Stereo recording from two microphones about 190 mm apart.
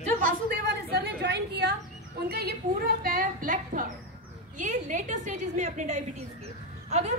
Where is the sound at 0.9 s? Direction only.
60° right (ahead or behind).